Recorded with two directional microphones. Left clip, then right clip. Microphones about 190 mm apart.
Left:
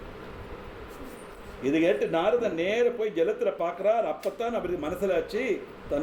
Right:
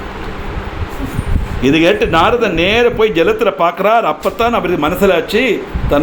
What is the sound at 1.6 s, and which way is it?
A man's voice, 25° right (ahead or behind).